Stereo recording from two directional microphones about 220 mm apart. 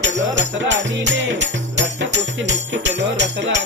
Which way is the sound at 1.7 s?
55° right (ahead or behind).